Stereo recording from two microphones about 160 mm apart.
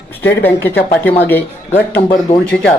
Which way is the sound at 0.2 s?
10° left (ahead or behind).